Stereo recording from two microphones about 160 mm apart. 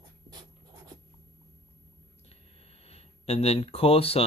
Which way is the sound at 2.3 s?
40° left (ahead or behind).